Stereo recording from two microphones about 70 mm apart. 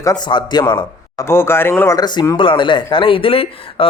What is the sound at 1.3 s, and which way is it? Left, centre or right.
Speech, left.